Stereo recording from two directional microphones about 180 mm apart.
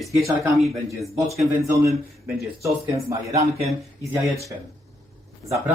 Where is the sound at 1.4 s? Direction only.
15° right (ahead or behind).